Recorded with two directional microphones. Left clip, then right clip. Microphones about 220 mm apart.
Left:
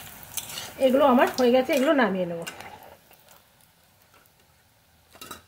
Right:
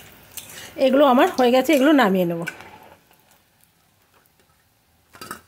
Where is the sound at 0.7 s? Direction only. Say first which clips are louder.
Right 4 dB; 50° right (ahead or behind).